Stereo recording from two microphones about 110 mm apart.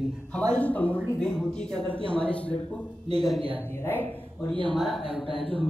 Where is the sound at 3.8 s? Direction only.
15° left (ahead or behind).